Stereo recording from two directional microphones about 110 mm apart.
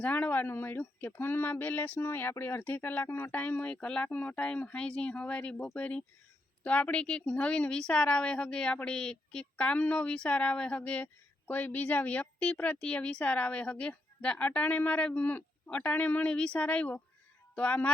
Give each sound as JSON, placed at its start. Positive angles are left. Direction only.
{"t": 0.0, "sound": "speech", "side_deg": 15}